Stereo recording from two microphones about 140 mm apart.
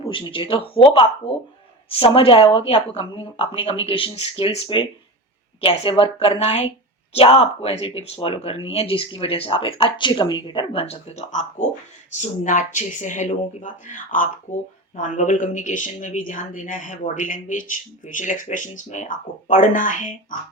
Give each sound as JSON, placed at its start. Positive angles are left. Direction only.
{"t": 0.0, "sound": "speech", "side_deg": 40}
{"t": 14.5, "sound": "speech", "side_deg": 55}